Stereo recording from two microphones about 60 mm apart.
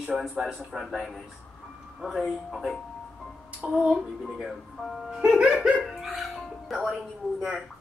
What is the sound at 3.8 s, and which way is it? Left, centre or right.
Speech, centre.